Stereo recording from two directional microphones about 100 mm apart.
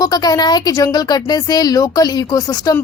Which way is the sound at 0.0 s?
40° left (ahead or behind).